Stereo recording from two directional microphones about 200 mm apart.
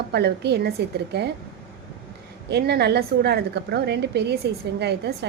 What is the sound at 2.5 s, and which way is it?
A woman's voice, 55° right (ahead or behind).